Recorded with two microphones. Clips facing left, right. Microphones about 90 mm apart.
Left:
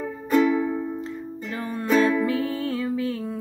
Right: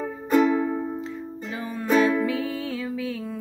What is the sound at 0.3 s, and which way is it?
Music, 25° right (ahead or behind).